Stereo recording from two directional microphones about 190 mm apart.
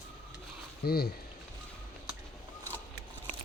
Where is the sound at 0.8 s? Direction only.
55° left (ahead or behind).